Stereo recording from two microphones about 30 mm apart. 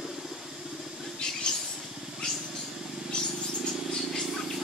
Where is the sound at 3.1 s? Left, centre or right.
Left.